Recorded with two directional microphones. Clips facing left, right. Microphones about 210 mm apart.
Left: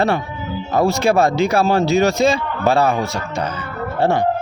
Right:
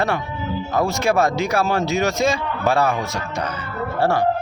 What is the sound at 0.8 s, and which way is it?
A man's voice, 30° left (ahead or behind).